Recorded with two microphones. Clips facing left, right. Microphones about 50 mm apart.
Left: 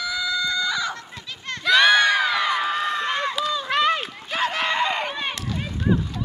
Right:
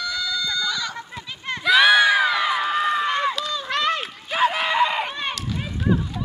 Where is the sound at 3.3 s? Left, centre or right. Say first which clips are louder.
Left 2 dB; centre.